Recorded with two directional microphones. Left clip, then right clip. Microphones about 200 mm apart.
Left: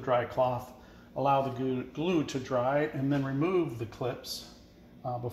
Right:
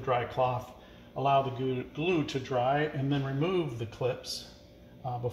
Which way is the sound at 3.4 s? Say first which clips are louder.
Left 1 dB; 15° left (ahead or behind).